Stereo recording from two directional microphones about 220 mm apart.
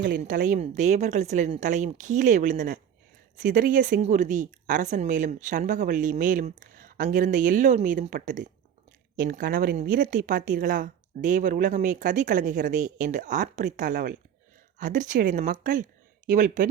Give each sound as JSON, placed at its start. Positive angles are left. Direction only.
{"t": 0.0, "sound": "a woman's voice", "side_deg": -40}